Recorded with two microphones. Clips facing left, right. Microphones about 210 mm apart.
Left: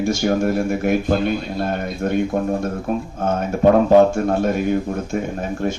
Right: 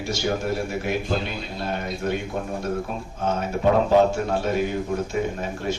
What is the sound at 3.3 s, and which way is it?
A man's voice, 50° left (ahead or behind).